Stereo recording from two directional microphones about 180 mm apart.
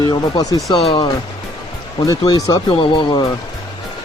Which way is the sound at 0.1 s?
25° left (ahead or behind).